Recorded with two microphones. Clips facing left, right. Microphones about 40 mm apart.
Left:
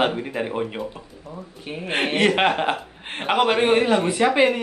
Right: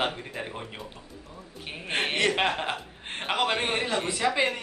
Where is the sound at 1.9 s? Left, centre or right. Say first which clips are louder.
Left 5 dB; centre.